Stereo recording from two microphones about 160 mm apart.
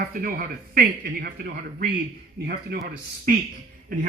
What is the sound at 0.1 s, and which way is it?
Speech, 65° right (ahead or behind).